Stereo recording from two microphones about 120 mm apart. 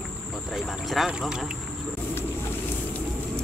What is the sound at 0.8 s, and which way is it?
Speech, centre (ahead or behind).